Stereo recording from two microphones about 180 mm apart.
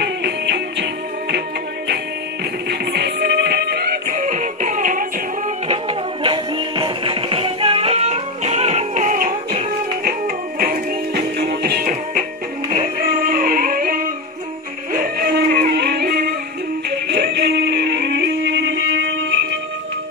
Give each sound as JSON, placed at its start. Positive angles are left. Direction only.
{"t": 0.0, "sound": "music", "side_deg": -65}
{"t": 2.7, "sound": "music", "side_deg": -65}
{"t": 5.7, "sound": "music", "side_deg": -30}
{"t": 15.7, "sound": "music", "side_deg": -65}